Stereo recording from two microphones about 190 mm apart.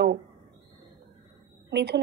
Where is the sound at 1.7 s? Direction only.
60° right (ahead or behind).